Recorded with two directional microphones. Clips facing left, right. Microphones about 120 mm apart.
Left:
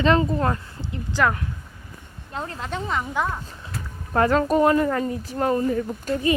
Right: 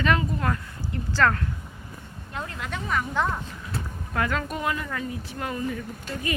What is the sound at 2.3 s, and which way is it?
Speech, 30° left (ahead or behind).